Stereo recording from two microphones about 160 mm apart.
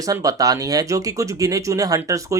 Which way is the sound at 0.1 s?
20° right (ahead or behind).